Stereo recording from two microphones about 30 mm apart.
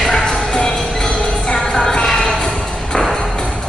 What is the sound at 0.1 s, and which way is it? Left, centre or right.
Music, left.